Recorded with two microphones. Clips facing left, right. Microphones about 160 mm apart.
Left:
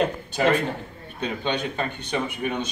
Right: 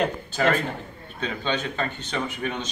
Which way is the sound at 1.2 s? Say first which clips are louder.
Left 1 dB; 15° left (ahead or behind).